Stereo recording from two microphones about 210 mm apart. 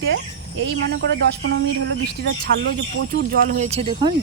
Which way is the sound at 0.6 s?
55° right (ahead or behind).